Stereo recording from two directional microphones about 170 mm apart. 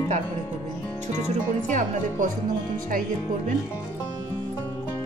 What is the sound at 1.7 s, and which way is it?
Speech, 50° right (ahead or behind).